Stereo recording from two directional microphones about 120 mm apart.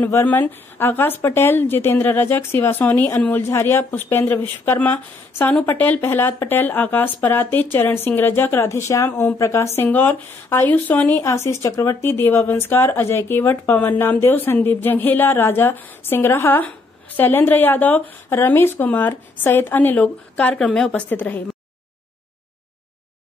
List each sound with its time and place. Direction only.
0.0 s speech: 20° left (ahead or behind)